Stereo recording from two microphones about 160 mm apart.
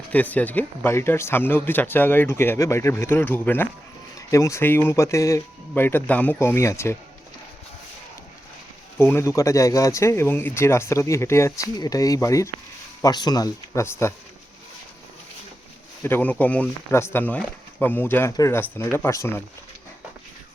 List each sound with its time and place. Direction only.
0.1 s speech: 10° left (ahead or behind)
9.0 s speech: 15° left (ahead or behind)
16.0 s speech: 10° left (ahead or behind)